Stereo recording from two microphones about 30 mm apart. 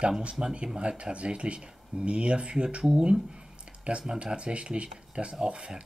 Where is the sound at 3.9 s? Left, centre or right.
Right.